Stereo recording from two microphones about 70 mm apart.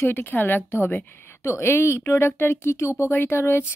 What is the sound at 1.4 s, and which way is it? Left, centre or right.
Speech, left.